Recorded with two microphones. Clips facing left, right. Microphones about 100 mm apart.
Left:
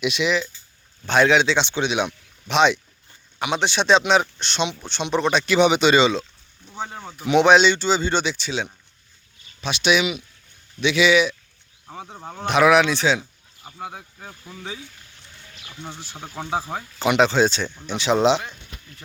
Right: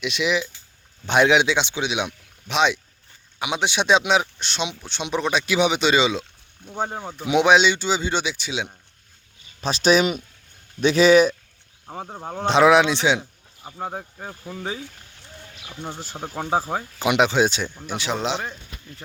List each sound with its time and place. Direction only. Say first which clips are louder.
0.0 s speech: left 3 dB; centre (ahead or behind)
1.0 s speech: even; 15° right (ahead or behind)
6.6 s speech: right 6 dB; 55° right (ahead or behind)
7.3 s speech: left 2 dB; 10° right (ahead or behind)
9.6 s speech: right 2 dB; 40° right (ahead or behind)
12.5 s speech: right 1 dB; 25° right (ahead or behind)
14.6 s speech: right 4 dB; 45° right (ahead or behind)
15.6 s speech: right 3 dB; 15° right (ahead or behind)